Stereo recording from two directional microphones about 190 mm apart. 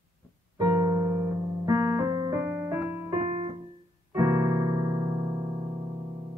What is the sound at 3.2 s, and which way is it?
Keyboard, 35° right (ahead or behind).